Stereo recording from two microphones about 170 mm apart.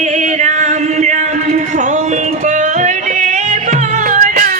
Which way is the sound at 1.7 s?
45° right (ahead or behind).